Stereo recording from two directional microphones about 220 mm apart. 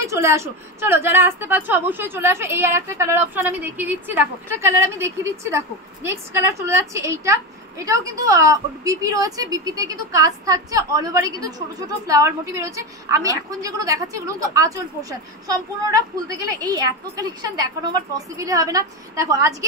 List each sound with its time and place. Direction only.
0.0 s a woman's voice: 15° right (ahead or behind)
6.6 s a woman's voice: 10° right (ahead or behind)